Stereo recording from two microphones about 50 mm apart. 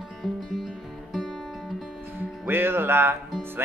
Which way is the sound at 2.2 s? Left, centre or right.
Right.